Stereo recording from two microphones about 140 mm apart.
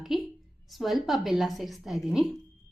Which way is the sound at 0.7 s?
Centre (ahead or behind).